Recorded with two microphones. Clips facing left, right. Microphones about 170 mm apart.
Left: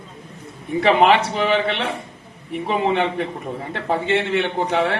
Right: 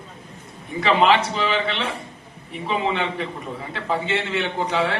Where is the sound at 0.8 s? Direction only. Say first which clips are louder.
Left 3 dB; 60° left (ahead or behind).